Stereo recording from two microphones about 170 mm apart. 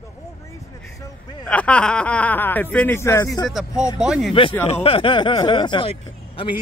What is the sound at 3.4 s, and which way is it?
Speech, centre (ahead or behind).